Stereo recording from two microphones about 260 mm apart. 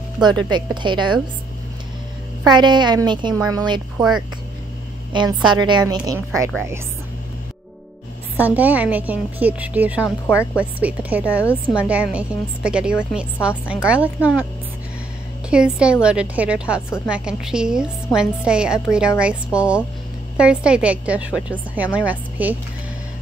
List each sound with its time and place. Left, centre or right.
0.5 s a woman's voice: centre
2.4 s a woman's voice: centre
5.1 s a woman's voice: centre
8.4 s a woman's voice: centre
15.5 s a woman's voice: centre